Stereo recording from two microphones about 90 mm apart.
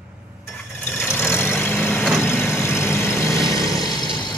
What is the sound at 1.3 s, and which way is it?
Vehicle, 25° left (ahead or behind).